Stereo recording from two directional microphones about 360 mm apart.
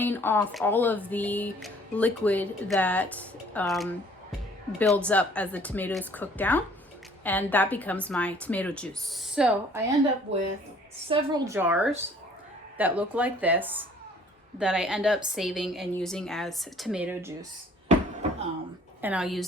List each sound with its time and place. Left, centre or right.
0.0 s speech: centre
10.3 s speech: right
11.1 s speech: centre
19.0 s speech: centre